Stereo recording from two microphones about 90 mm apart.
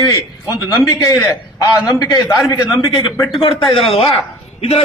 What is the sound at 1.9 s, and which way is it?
A man's voice, 50° left (ahead or behind).